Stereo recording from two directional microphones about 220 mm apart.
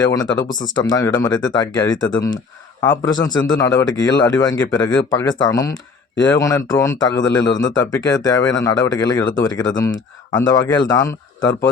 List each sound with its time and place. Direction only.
0.0 s speech: 15° left (ahead or behind)